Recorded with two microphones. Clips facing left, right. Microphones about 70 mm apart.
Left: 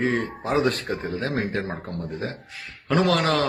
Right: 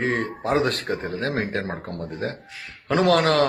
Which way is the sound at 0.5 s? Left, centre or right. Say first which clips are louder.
Even; right.